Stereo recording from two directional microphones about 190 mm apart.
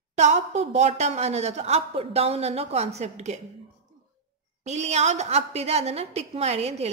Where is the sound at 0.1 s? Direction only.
35° right (ahead or behind).